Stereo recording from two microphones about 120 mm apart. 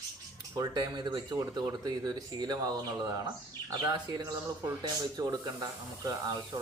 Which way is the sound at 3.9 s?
35° right (ahead or behind).